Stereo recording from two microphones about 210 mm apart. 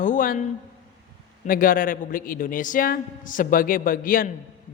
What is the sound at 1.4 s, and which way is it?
A man's voice, 40° left (ahead or behind).